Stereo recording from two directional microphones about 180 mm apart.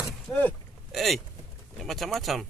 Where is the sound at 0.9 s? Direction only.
Centre (ahead or behind).